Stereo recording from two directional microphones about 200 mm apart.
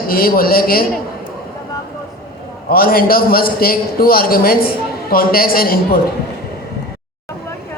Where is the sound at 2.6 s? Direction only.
50° left (ahead or behind).